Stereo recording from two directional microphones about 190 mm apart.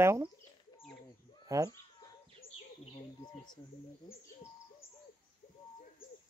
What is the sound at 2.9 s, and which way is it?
Bird, 20° left (ahead or behind).